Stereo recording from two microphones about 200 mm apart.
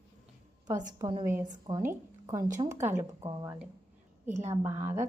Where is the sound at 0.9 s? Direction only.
20° right (ahead or behind).